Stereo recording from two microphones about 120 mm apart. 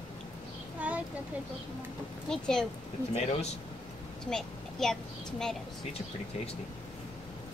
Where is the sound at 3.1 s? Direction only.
65° left (ahead or behind).